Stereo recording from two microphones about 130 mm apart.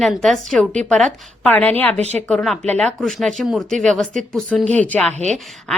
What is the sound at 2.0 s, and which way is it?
Speech, 55° right (ahead or behind).